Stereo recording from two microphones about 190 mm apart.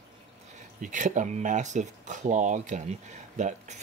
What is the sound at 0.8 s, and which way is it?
Speech, 40° right (ahead or behind).